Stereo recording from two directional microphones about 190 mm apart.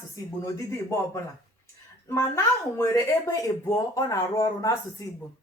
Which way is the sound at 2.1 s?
15° left (ahead or behind).